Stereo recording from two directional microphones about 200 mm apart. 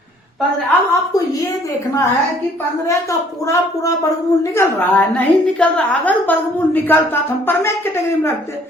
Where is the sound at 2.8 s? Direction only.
15° left (ahead or behind).